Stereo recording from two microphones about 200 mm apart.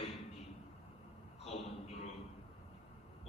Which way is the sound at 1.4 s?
30° left (ahead or behind).